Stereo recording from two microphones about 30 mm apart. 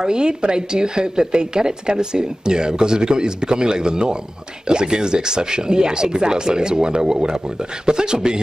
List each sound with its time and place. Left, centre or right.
0.0 s a woman's voice: right